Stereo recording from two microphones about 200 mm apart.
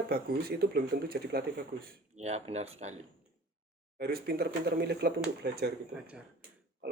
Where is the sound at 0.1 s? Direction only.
50° right (ahead or behind).